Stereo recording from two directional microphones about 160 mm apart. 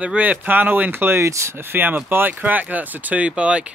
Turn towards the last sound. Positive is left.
turn(degrees=-5)  # may be behind; listen again after turning